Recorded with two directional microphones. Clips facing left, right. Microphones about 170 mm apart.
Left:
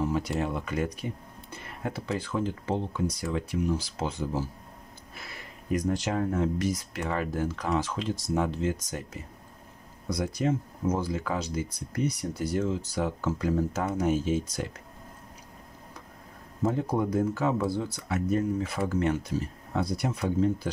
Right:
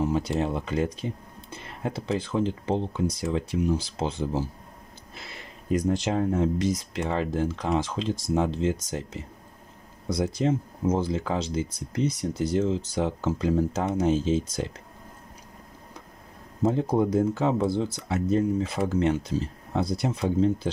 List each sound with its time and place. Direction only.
0.3 s speech: 25° right (ahead or behind)
16.6 s speech: 25° right (ahead or behind)